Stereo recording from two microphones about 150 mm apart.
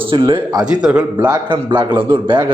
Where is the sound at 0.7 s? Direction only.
5° right (ahead or behind).